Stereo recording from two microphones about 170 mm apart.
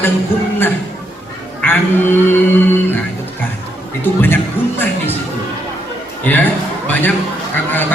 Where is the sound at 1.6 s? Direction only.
10° left (ahead or behind).